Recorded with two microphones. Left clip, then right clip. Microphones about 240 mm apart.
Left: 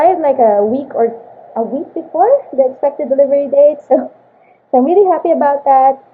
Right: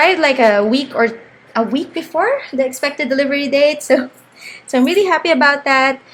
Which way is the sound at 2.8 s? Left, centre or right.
Right.